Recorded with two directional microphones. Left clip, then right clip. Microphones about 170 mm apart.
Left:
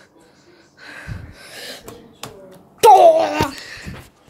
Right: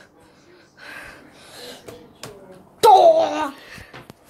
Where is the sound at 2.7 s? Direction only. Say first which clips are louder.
Left 3 dB; 15° left (ahead or behind).